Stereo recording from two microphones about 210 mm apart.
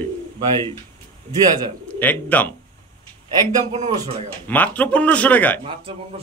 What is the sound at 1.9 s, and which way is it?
Speech, 10° left (ahead or behind).